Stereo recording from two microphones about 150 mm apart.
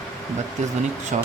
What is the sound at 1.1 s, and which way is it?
Speech, 55° right (ahead or behind).